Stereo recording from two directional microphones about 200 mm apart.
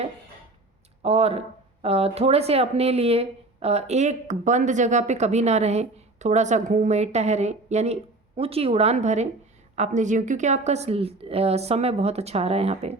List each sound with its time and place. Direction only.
1.0 s speech: 30° right (ahead or behind)